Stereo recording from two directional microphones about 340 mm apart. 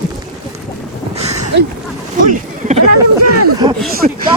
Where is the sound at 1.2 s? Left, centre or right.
Centre.